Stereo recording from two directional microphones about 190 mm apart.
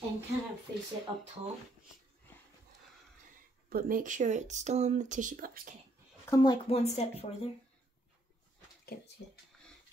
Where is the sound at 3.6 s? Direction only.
50° right (ahead or behind).